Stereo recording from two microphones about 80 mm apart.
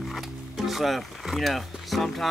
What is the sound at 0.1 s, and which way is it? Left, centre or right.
Speech, centre.